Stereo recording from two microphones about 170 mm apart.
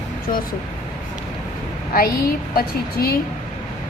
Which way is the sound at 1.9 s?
60° left (ahead or behind).